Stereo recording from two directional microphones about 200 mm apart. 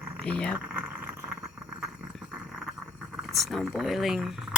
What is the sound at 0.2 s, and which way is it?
Speech, 5° left (ahead or behind).